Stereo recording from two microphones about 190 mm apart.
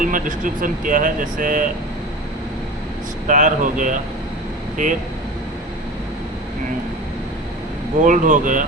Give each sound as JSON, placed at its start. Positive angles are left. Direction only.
{"t": 0.0, "sound": "speech", "side_deg": -45}
{"t": 3.2, "sound": "speech", "side_deg": -40}
{"t": 8.0, "sound": "speech", "side_deg": -45}